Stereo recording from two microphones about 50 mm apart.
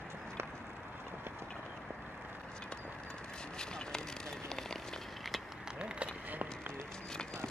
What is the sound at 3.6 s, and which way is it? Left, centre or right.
Vehicle, centre.